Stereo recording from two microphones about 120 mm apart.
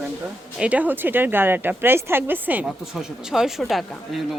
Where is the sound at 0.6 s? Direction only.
10° right (ahead or behind).